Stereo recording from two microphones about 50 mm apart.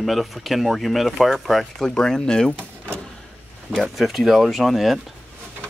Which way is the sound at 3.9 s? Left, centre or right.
Centre.